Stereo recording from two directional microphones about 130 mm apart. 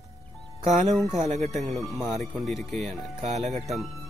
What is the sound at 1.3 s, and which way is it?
Speech, 60° right (ahead or behind).